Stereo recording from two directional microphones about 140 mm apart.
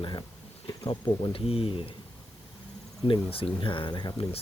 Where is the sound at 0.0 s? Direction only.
30° left (ahead or behind).